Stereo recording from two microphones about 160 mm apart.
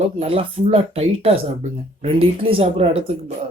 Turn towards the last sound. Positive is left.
turn(degrees=-40)  # may be behind; listen again after turning